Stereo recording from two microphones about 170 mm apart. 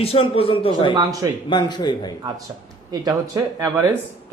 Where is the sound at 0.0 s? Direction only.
35° left (ahead or behind).